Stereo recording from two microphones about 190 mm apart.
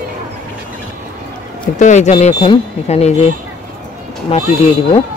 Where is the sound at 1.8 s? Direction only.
40° left (ahead or behind).